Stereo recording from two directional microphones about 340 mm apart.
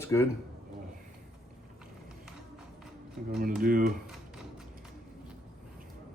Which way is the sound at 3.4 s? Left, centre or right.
Right.